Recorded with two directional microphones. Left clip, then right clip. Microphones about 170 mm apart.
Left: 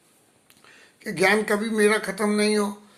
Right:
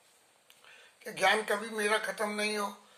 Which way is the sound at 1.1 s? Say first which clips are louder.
Left 7 dB; 15° left (ahead or behind).